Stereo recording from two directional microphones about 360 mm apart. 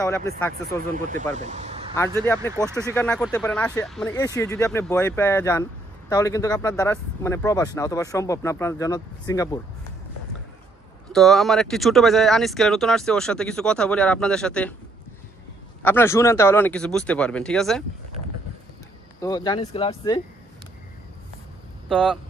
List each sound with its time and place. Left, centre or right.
0.9 s speech: right
2.0 s speech: centre
11.1 s speech: centre
15.8 s speech: centre
19.2 s speech: centre
21.8 s speech: centre